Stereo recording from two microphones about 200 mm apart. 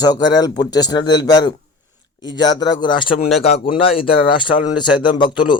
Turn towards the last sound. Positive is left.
turn(degrees=25)  # may be behind; listen again after turning